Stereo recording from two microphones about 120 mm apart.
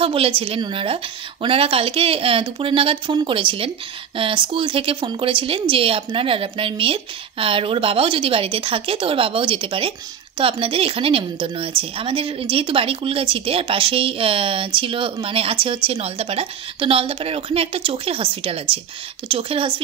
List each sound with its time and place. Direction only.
0.0 s speech: 50° right (ahead or behind)